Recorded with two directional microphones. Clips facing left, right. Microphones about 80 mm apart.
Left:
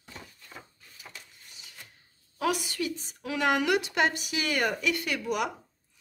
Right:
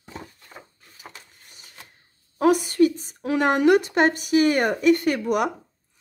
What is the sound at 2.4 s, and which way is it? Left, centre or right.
A woman's voice, right.